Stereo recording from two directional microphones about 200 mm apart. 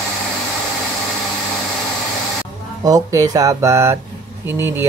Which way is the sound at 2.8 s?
15° right (ahead or behind).